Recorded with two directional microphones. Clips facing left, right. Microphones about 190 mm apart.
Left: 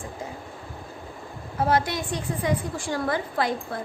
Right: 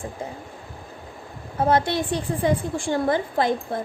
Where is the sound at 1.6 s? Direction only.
25° right (ahead or behind).